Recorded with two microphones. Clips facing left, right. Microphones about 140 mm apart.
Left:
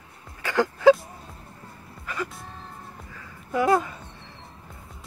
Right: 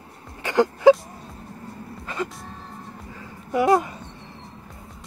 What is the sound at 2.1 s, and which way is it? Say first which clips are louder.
Vehicle: right 3 dB; 25° right (ahead or behind).